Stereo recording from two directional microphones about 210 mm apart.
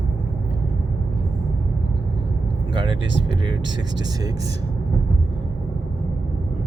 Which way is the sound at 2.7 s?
25° right (ahead or behind).